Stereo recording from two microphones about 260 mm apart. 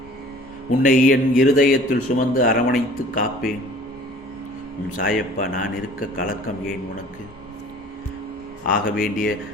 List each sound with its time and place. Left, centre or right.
0.8 s speech: left
4.9 s speech: left
8.6 s speech: left